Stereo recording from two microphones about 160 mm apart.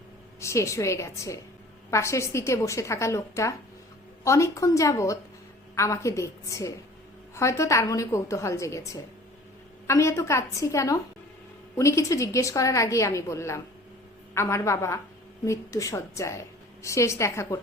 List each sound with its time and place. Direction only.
0.3 s a woman's voice: 20° left (ahead or behind)